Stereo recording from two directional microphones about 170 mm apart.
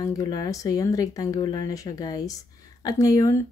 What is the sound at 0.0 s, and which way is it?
A woman's voice, 20° left (ahead or behind).